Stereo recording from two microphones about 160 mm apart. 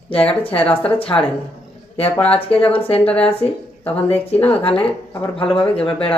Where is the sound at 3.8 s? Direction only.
40° left (ahead or behind).